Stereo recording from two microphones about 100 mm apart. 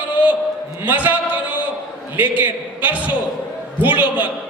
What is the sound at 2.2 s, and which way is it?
Speech, 15° right (ahead or behind).